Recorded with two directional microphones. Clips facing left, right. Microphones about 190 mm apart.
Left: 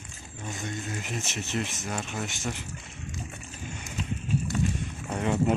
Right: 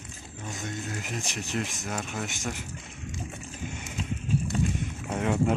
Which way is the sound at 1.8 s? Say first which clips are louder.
Even; centre (ahead or behind).